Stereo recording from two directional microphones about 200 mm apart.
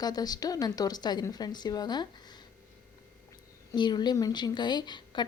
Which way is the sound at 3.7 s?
20° left (ahead or behind).